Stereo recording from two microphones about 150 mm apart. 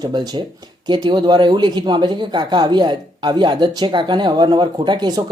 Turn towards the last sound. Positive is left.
turn(degrees=-30)  # may be behind; listen again after turning